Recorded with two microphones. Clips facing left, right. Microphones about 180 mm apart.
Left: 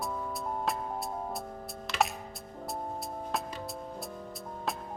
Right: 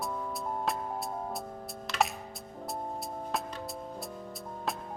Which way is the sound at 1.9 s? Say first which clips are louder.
Even; centre (ahead or behind).